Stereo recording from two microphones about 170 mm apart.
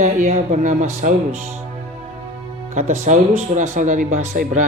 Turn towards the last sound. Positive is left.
turn(degrees=-50)  # may be behind; listen again after turning